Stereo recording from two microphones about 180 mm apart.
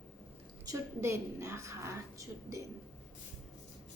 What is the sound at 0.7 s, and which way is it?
A woman's voice, 15° right (ahead or behind).